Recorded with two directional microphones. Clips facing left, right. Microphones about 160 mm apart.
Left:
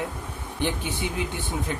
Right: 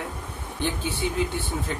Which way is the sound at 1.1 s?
15° left (ahead or behind).